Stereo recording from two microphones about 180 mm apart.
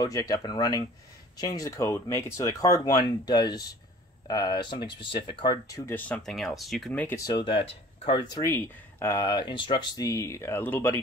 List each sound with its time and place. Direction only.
0.0 s speech: 20° left (ahead or behind)
7.2 s speech: 25° left (ahead or behind)
8.5 s speech: 10° left (ahead or behind)